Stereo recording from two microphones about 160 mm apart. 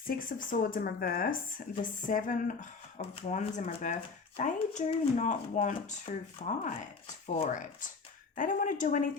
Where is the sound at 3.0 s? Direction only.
45° left (ahead or behind).